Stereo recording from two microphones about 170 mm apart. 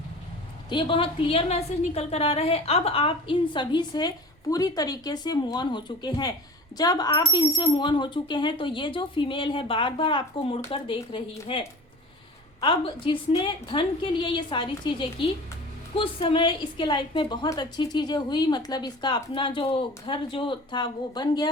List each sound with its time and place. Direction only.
0.7 s a woman's voice: 30° left (ahead or behind)